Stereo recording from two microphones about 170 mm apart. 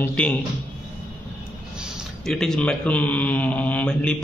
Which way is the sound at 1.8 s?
Centre (ahead or behind).